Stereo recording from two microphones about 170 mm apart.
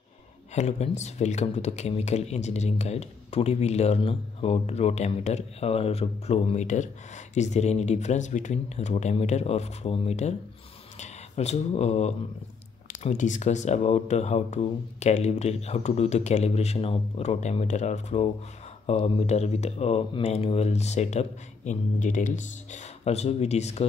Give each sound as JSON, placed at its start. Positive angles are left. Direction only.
{"t": 0.6, "sound": "speech", "side_deg": 40}